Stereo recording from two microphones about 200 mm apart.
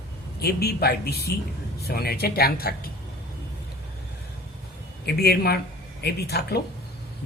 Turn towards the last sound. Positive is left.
turn(degrees=55)  # may be behind; listen again after turning